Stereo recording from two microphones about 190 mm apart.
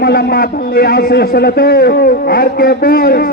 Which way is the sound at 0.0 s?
55° left (ahead or behind).